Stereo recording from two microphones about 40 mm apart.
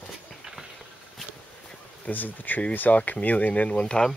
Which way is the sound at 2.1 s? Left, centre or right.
Left.